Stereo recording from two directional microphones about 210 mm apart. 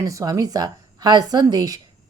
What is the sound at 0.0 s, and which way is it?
A woman's voice, 15° right (ahead or behind).